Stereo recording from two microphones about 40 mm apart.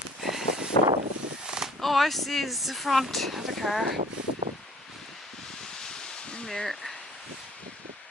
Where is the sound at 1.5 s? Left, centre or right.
Centre.